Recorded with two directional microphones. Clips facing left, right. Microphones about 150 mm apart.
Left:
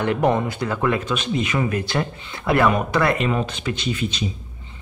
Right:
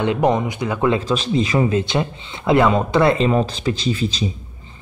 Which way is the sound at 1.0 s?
30° right (ahead or behind).